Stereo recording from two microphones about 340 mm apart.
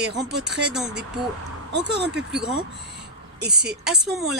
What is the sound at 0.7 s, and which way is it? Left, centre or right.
Speech, centre.